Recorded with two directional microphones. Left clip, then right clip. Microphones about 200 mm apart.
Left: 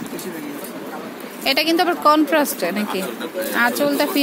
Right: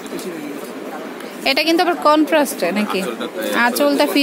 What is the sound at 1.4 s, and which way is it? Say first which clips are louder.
A woman's voice: right 2 dB; 5° right (ahead or behind).